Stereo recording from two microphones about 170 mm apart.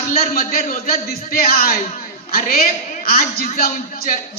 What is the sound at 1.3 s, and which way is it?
A man's voice, 60° left (ahead or behind).